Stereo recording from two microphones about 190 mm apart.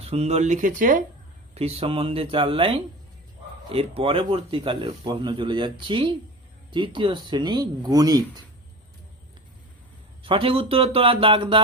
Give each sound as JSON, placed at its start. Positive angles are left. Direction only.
{"t": 0.0, "sound": "speech", "side_deg": -35}
{"t": 1.5, "sound": "speech", "side_deg": -30}
{"t": 10.2, "sound": "speech", "side_deg": -25}